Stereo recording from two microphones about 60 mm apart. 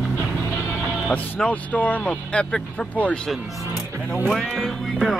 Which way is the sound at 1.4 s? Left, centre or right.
Left.